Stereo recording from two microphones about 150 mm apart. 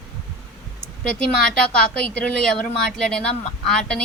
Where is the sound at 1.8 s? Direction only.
5° left (ahead or behind).